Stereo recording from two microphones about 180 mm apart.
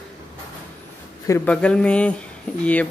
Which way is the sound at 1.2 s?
15° left (ahead or behind).